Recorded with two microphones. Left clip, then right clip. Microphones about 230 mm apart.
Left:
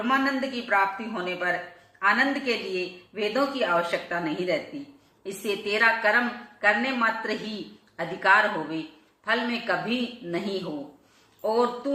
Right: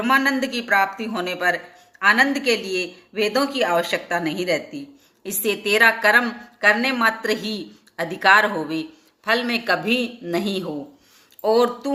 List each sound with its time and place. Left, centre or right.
0.0 s speech: right
11.4 s speech: right